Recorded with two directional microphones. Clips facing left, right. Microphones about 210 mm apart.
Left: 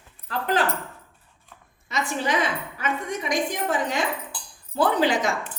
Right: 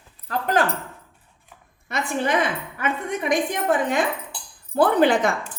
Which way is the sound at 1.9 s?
55° right (ahead or behind).